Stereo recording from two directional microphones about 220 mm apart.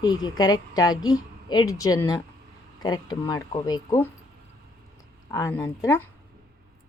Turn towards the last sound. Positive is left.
turn(degrees=15)  # may be behind; listen again after turning